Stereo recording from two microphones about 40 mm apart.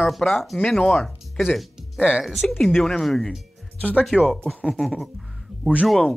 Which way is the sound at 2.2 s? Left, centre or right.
Centre.